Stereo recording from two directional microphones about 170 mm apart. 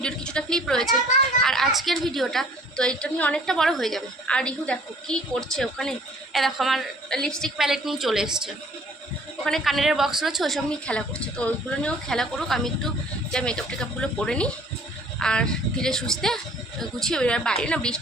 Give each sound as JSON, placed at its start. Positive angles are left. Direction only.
{"t": 0.0, "sound": "a woman's voice", "side_deg": 5}
{"t": 9.4, "sound": "a woman's voice", "side_deg": 0}